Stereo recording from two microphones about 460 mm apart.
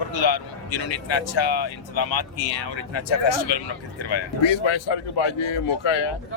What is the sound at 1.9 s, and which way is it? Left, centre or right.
A woman's voice, left.